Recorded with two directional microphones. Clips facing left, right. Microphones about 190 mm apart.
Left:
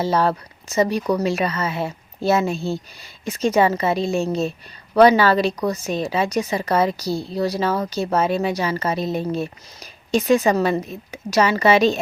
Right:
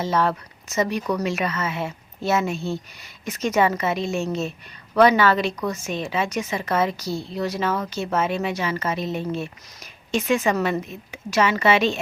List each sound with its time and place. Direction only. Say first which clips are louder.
0.0 s speech: left 3 dB; 35° left (ahead or behind)